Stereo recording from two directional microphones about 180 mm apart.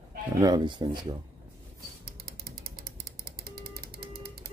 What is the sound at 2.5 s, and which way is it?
Ratchet, 55° right (ahead or behind).